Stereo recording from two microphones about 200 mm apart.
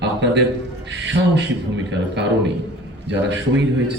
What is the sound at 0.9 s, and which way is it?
Speech, 60° right (ahead or behind).